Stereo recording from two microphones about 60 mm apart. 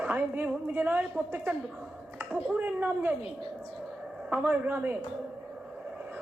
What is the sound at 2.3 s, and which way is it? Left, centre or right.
Speech, centre.